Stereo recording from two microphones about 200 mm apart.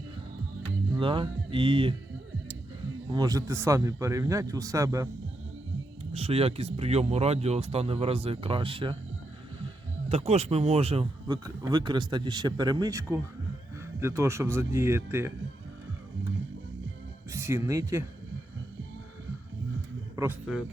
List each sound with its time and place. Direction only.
0.9 s speech: 25° right (ahead or behind)
3.1 s a man's voice: 20° right (ahead or behind)
6.1 s speech: 30° right (ahead or behind)
10.1 s a man's voice: 35° right (ahead or behind); by 15.3 s 10° right (ahead or behind)
17.3 s speech: 15° right (ahead or behind)